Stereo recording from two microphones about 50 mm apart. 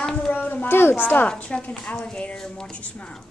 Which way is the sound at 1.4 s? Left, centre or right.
Left.